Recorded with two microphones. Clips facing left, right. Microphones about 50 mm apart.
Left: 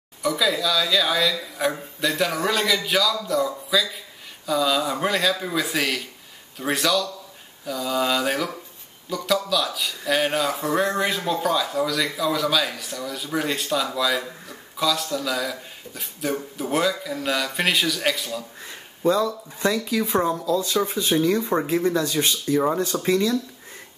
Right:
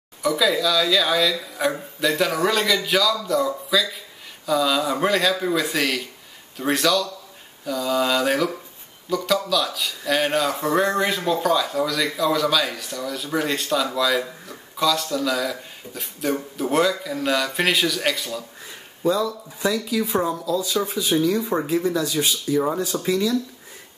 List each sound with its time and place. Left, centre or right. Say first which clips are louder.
0.2 s speech: right 2 dB; centre
20.2 s speech: left 3 dB; centre
20.8 s speech: left 1 dB; left
21.3 s speech: even; centre
22.1 s speech: even; centre
22.5 s speech: left 1 dB; centre